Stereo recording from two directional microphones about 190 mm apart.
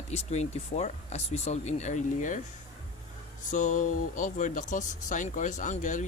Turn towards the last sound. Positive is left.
turn(degrees=40)  # may be behind; listen again after turning